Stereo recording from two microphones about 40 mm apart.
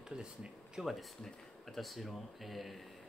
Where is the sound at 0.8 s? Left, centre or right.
Centre.